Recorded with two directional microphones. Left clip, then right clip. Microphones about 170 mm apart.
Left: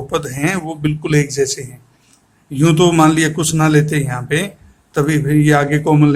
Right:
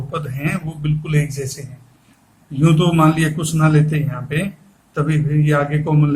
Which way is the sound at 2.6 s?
55° left (ahead or behind).